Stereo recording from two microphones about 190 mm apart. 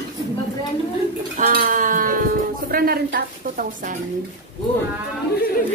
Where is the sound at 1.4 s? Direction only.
45° right (ahead or behind).